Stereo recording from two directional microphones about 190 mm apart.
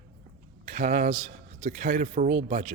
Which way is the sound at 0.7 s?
45° right (ahead or behind).